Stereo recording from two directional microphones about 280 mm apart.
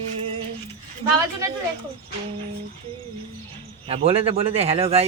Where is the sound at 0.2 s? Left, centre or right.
Centre.